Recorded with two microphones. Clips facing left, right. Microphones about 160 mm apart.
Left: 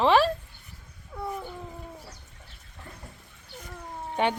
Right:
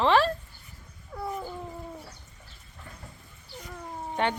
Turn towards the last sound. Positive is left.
turn(degrees=10)  # may be behind; listen again after turning